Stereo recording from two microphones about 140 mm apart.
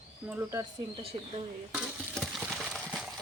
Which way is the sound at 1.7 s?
Centre (ahead or behind).